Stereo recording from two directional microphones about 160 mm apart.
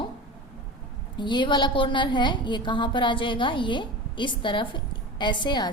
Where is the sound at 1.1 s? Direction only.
30° left (ahead or behind).